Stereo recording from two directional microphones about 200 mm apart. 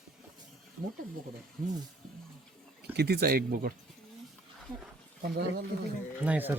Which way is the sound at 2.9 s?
55° right (ahead or behind).